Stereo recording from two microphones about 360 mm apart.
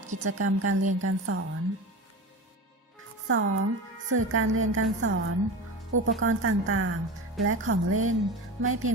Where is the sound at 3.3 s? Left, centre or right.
Right.